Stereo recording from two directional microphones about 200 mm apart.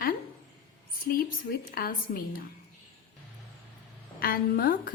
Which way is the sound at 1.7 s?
45° left (ahead or behind).